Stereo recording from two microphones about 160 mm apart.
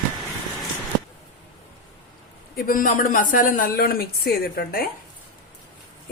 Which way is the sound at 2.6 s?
60° left (ahead or behind).